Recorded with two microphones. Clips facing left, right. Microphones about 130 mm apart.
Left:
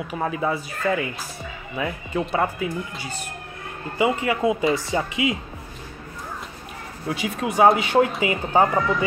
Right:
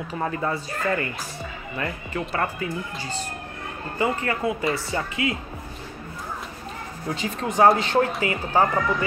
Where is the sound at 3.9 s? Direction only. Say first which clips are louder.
Left 3 dB; 15° left (ahead or behind).